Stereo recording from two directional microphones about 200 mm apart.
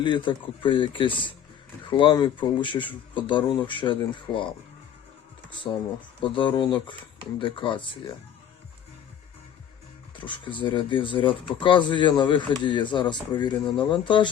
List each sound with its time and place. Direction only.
0.0 s speech: 25° left (ahead or behind)
5.7 s speech: 15° left (ahead or behind)
10.2 s speech: 25° left (ahead or behind)